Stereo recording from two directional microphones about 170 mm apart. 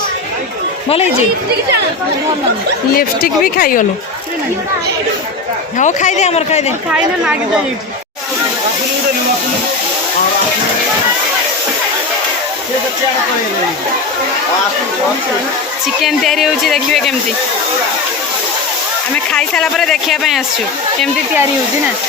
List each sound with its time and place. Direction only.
3.0 s a woman's voice: 60° left (ahead or behind)
5.7 s speech: 45° left (ahead or behind)
6.9 s speech: 5° right (ahead or behind)
16.0 s speech: centre (ahead or behind)
19.1 s speech: 5° left (ahead or behind)